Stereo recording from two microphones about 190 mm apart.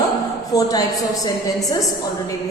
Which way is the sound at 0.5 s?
20° left (ahead or behind).